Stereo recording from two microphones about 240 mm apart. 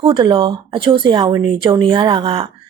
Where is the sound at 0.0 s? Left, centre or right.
Right.